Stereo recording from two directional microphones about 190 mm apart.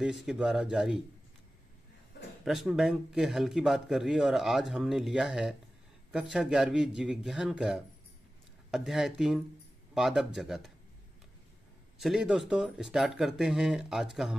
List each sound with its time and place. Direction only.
0.0 s a man's voice: centre (ahead or behind)
2.4 s a man's voice: centre (ahead or behind)
12.0 s a man's voice: centre (ahead or behind)